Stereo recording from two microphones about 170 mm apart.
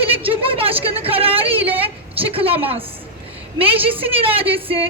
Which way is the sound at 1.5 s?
10° right (ahead or behind).